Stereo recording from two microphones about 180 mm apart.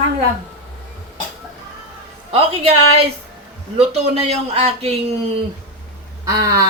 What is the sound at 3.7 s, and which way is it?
A man's voice, 35° right (ahead or behind).